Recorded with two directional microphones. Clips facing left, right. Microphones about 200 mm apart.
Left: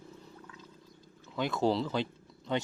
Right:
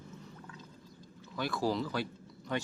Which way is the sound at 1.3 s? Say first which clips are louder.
Left 3 dB; 20° left (ahead or behind).